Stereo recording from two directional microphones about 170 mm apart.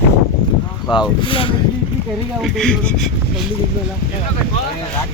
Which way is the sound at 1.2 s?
30° left (ahead or behind).